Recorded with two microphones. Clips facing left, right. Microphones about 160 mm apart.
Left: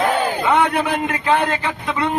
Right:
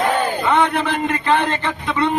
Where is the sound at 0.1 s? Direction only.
10° left (ahead or behind).